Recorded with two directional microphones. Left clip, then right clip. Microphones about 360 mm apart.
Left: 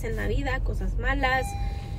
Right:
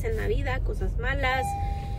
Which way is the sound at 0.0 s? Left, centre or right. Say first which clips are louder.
Right 1 dB; centre.